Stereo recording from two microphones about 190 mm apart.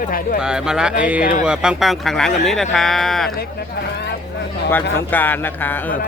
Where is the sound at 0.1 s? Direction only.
50° left (ahead or behind).